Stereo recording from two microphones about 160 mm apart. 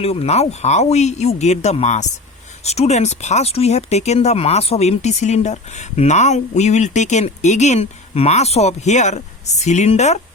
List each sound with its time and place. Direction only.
0.0 s speech: 40° left (ahead or behind)